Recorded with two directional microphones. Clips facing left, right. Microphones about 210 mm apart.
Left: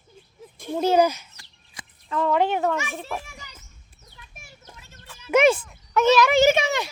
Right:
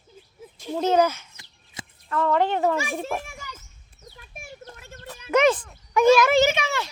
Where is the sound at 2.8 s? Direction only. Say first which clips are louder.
Right 3 dB; 30° right (ahead or behind).